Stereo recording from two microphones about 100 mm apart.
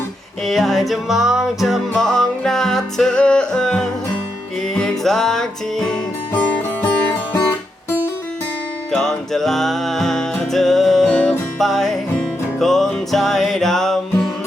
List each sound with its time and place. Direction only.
0.4 s music: centre (ahead or behind)
6.3 s music: 15° left (ahead or behind)
8.9 s music: 5° left (ahead or behind)